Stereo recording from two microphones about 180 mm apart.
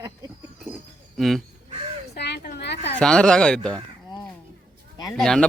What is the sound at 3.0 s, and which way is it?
Speech, 5° left (ahead or behind).